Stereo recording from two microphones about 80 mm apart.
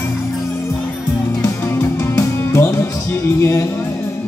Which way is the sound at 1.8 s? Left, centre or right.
Left.